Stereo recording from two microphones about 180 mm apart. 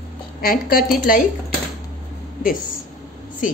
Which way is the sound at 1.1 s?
50° left (ahead or behind).